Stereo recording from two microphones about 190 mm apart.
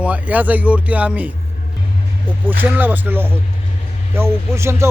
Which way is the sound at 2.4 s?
10° right (ahead or behind).